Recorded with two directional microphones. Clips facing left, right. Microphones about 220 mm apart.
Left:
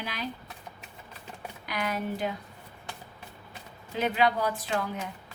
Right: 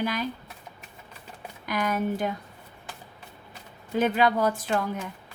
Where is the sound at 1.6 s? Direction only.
45° right (ahead or behind).